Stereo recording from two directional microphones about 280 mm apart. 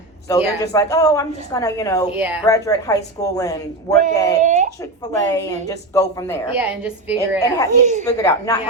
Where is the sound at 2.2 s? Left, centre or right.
Centre.